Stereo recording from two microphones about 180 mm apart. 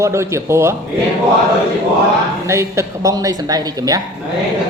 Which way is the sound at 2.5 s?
15° right (ahead or behind).